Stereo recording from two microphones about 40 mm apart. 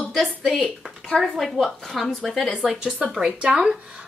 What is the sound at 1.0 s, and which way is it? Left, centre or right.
A woman's voice, centre.